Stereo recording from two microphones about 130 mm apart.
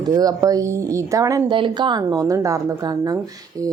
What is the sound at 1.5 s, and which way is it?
A woman's voice, 40° right (ahead or behind).